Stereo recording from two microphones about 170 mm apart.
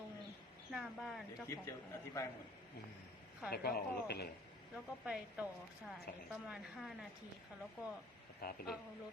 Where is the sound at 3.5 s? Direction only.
70° left (ahead or behind).